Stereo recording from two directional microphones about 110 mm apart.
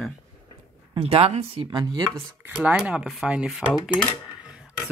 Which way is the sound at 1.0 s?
65° right (ahead or behind).